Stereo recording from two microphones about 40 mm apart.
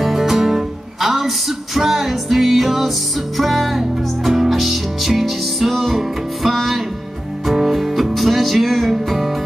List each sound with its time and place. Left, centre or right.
0.0 s music: centre